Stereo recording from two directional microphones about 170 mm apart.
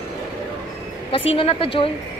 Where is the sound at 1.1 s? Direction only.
35° left (ahead or behind).